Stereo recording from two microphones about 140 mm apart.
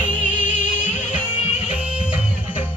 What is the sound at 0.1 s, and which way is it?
Music, 65° left (ahead or behind).